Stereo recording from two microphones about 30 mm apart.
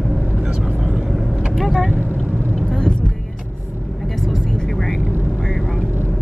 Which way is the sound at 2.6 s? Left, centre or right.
Left.